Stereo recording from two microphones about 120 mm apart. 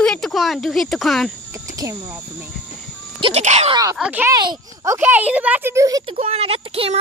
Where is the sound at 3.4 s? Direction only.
70° right (ahead or behind).